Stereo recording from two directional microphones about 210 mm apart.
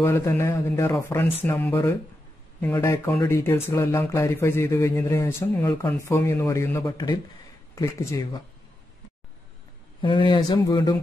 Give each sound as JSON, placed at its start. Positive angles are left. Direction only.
{"t": 0.0, "sound": "speech", "side_deg": 15}
{"t": 10.0, "sound": "speech", "side_deg": 25}